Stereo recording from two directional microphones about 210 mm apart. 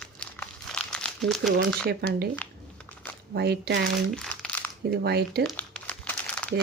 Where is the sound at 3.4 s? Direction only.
50° right (ahead or behind).